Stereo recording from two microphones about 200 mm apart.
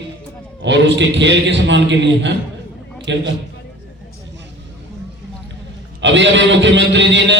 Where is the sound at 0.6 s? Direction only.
60° right (ahead or behind).